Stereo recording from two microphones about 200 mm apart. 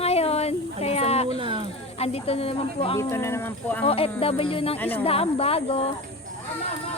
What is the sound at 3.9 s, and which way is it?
Speech, 30° left (ahead or behind).